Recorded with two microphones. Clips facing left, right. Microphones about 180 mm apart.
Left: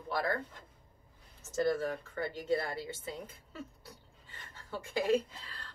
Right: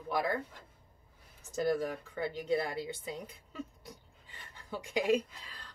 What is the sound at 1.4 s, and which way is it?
Speech, 15° right (ahead or behind).